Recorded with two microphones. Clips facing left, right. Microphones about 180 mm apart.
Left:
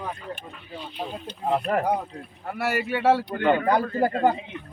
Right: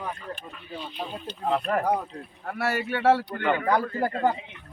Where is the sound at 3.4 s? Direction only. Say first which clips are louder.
Left 3 dB; 30° left (ahead or behind).